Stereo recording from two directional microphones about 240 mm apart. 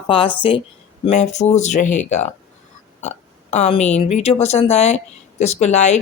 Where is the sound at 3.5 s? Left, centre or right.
Left.